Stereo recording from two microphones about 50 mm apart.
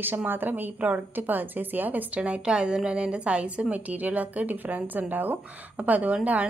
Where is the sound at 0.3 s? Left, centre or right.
Right.